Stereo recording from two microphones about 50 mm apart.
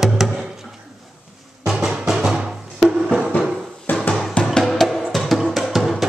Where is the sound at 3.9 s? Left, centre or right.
Left.